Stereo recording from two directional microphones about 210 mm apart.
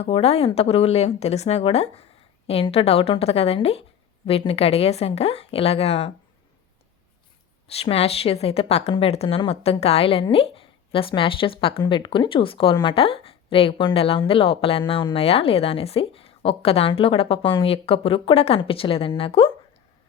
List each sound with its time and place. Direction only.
0.0 s a woman's voice: 30° left (ahead or behind)
7.7 s a woman's voice: 30° left (ahead or behind)